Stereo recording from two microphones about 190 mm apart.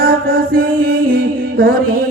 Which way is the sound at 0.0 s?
50° right (ahead or behind).